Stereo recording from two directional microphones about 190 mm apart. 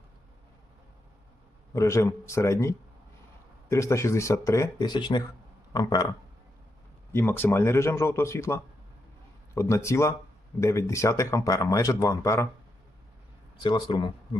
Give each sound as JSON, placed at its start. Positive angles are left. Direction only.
{"t": 1.7, "sound": "speech", "side_deg": 15}
{"t": 7.1, "sound": "speech", "side_deg": 10}
{"t": 13.6, "sound": "speech", "side_deg": 25}